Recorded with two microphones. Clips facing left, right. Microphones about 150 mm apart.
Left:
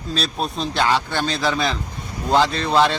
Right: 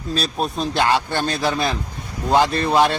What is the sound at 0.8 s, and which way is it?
A man's voice, 15° right (ahead or behind).